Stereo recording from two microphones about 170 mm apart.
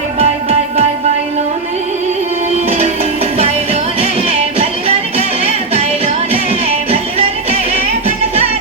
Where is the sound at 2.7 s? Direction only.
40° right (ahead or behind).